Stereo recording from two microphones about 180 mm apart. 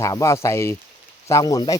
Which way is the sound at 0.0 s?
15° left (ahead or behind).